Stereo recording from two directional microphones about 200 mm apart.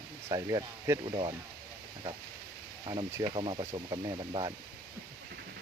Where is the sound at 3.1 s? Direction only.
25° right (ahead or behind).